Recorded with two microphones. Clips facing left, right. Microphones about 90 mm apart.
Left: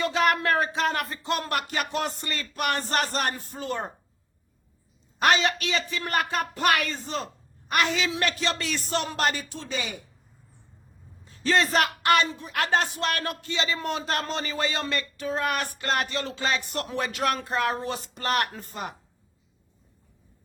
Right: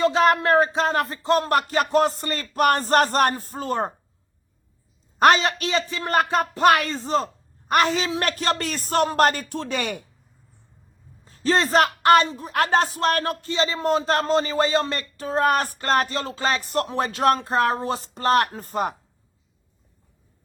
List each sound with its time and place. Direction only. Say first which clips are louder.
0.0 s a woman's voice: right 5 dB; 35° right (ahead or behind)
5.2 s a woman's voice: right 5 dB; 40° right (ahead or behind); by 10.0 s 60° right (ahead or behind)
11.3 s a woman's voice: right 3 dB; 35° right (ahead or behind)